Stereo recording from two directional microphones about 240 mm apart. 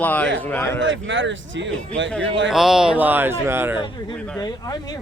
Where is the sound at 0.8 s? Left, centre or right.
Right.